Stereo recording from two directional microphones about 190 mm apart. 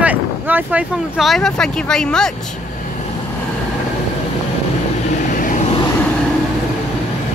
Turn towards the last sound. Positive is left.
turn(degrees=45)  # may be behind; listen again after turning